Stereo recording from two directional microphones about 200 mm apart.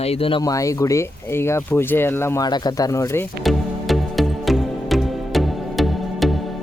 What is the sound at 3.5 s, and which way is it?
Music, centre (ahead or behind).